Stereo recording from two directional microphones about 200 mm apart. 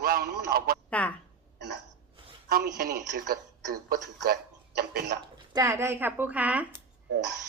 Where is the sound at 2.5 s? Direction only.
50° right (ahead or behind).